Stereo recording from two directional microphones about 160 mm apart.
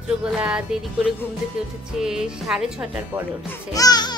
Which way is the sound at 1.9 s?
5° right (ahead or behind).